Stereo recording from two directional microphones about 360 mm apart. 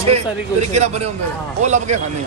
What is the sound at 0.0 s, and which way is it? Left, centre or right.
A man's voice, centre.